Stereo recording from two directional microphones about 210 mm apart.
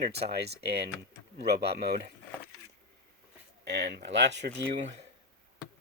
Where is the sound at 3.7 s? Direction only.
55° right (ahead or behind).